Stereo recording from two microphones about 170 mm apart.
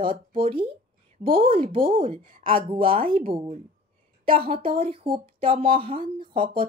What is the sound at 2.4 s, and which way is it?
Speech, 30° right (ahead or behind).